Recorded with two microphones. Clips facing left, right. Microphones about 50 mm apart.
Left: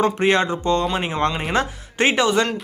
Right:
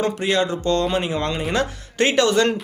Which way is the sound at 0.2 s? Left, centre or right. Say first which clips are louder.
Left 2 dB; left.